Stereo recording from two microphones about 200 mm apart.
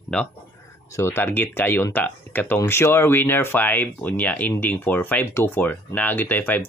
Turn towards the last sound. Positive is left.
turn(degrees=10)  # may be behind; listen again after turning